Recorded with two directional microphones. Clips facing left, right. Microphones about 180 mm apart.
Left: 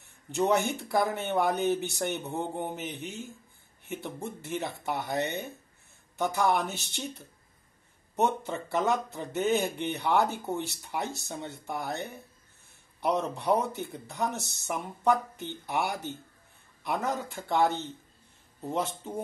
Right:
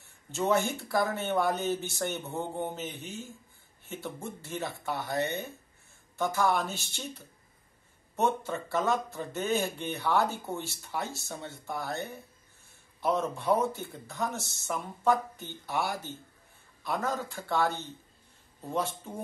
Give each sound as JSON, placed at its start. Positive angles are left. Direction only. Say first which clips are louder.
{"t": 0.3, "sound": "speech", "louder": "left 2 dB", "side_deg": 15}
{"t": 8.2, "sound": "speech", "louder": "left 1 dB", "side_deg": 20}
{"t": 13.3, "sound": "speech", "louder": "even", "side_deg": 20}